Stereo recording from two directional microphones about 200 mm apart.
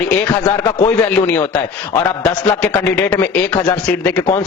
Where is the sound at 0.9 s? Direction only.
10° left (ahead or behind).